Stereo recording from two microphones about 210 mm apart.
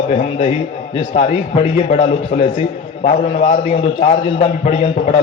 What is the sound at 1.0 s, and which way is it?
A man's voice, 25° left (ahead or behind).